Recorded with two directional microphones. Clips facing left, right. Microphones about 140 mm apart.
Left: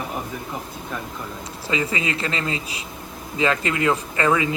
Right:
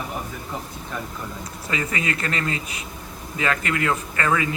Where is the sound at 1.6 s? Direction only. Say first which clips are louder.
Left 2 dB; 25° left (ahead or behind).